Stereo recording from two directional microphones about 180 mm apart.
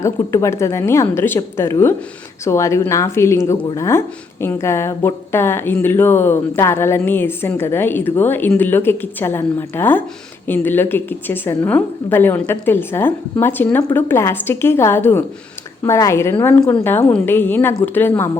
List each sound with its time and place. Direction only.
0.0 s a woman's voice: 15° left (ahead or behind)